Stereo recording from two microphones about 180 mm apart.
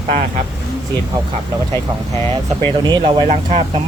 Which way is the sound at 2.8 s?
25° right (ahead or behind).